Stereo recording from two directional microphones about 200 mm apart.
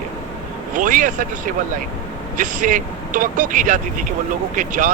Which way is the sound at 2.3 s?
40° right (ahead or behind).